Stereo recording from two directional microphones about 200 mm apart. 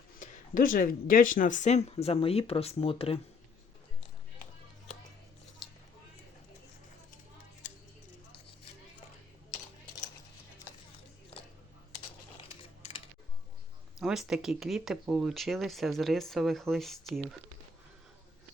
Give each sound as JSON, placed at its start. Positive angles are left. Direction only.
{"t": 0.2, "sound": "speech", "side_deg": 45}
{"t": 11.3, "sound": "a sound", "side_deg": 30}
{"t": 14.0, "sound": "speech", "side_deg": 0}